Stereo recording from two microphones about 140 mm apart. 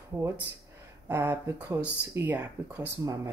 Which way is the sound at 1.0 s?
15° right (ahead or behind).